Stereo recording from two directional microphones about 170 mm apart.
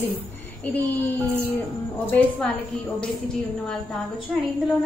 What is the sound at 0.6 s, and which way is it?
Music, 10° left (ahead or behind).